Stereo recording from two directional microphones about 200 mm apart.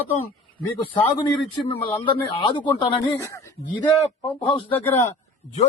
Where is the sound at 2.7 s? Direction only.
20° left (ahead or behind).